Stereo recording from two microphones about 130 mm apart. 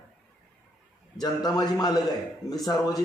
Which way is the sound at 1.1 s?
30° left (ahead or behind).